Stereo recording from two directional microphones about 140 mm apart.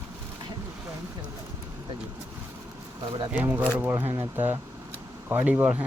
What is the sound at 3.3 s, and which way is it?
Speech, 10° right (ahead or behind).